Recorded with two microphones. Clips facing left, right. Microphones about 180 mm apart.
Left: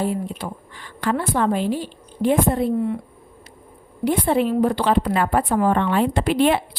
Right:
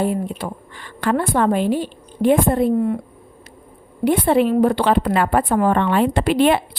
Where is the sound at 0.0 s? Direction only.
60° right (ahead or behind).